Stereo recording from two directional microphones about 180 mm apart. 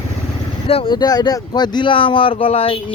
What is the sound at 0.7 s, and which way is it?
Speech, 30° left (ahead or behind).